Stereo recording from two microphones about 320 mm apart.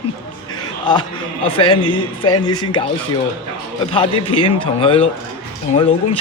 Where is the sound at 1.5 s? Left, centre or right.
Centre.